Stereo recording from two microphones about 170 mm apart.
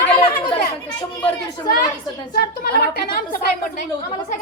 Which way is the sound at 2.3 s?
60° left (ahead or behind).